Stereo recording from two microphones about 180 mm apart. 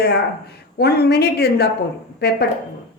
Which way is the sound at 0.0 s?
60° left (ahead or behind).